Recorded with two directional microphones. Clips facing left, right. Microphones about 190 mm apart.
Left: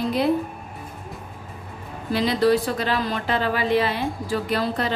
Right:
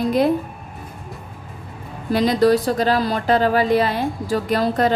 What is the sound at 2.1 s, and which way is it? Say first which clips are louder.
A woman's voice: right 4 dB; 45° right (ahead or behind).